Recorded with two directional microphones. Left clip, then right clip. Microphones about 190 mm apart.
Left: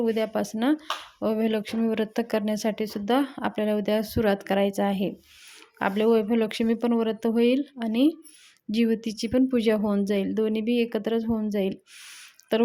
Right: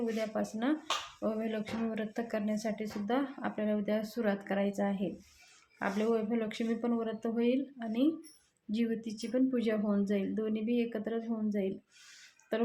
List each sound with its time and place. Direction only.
0.0 s speech: 50° left (ahead or behind)